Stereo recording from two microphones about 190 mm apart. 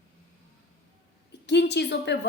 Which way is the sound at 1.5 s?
65° left (ahead or behind).